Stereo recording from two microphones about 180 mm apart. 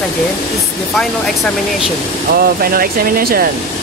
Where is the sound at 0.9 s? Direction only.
Centre (ahead or behind).